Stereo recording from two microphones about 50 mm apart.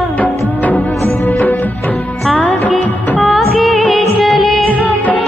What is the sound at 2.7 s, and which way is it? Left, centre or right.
Music of bollywood, centre.